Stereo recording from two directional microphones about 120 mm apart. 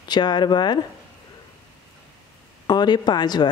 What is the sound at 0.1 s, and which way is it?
Speech, 35° left (ahead or behind).